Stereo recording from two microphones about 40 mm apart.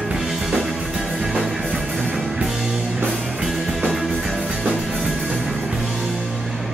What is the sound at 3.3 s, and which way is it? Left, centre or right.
Music, centre.